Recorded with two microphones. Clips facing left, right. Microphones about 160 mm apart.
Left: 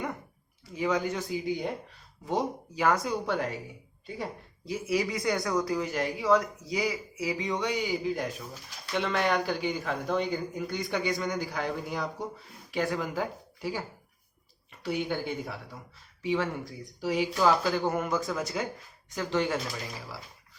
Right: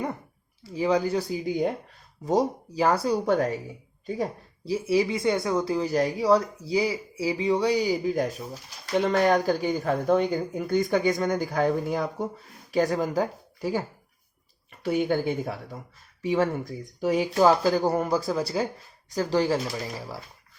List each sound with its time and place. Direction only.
0.7 s speech: 30° right (ahead or behind)
14.8 s speech: 50° right (ahead or behind)